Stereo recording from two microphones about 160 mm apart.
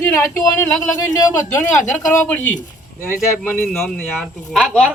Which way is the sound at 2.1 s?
10° left (ahead or behind).